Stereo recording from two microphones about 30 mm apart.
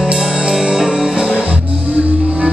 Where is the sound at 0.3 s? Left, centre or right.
Right.